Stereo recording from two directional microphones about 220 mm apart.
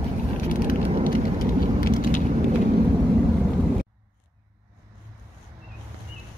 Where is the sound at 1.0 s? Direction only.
40° left (ahead or behind).